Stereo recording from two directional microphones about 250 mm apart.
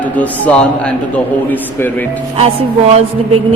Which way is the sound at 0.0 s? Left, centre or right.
Centre.